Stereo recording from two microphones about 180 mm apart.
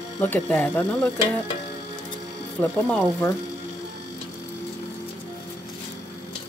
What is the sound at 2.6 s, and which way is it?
Speech, 5° left (ahead or behind).